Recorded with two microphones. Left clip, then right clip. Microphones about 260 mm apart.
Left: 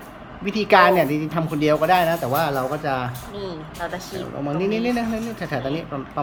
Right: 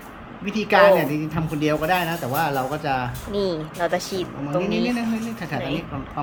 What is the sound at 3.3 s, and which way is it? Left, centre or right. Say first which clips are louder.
Speech: right 7 dB; right.